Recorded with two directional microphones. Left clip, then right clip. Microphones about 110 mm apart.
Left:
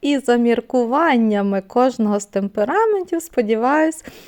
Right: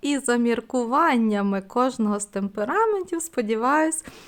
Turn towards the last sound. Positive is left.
turn(degrees=25)  # may be behind; listen again after turning